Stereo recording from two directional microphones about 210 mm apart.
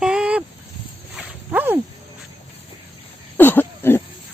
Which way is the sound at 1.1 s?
5° right (ahead or behind).